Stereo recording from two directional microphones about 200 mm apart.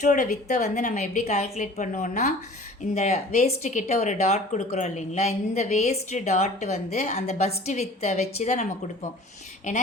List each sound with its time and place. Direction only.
0.0 s speech: 40° left (ahead or behind)